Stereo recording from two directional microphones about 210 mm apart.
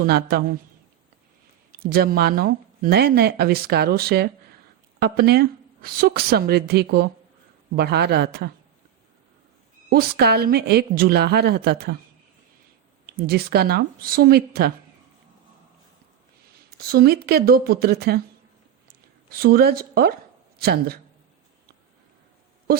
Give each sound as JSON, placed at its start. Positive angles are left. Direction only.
{"t": 0.0, "sound": "speech", "side_deg": -50}
{"t": 1.7, "sound": "speech", "side_deg": -45}
{"t": 9.9, "sound": "speech", "side_deg": -50}
{"t": 13.1, "sound": "speech", "side_deg": -45}
{"t": 16.7, "sound": "speech", "side_deg": -50}
{"t": 19.3, "sound": "speech", "side_deg": -45}